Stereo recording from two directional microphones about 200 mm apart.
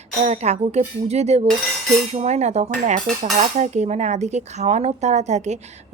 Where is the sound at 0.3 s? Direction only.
35° right (ahead or behind).